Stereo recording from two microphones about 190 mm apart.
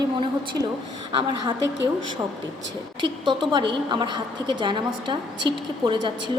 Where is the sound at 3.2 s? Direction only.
25° right (ahead or behind).